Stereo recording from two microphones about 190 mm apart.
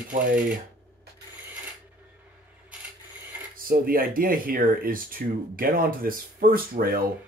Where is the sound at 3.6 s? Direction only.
50° right (ahead or behind).